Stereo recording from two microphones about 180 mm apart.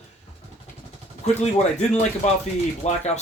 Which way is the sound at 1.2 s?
40° left (ahead or behind).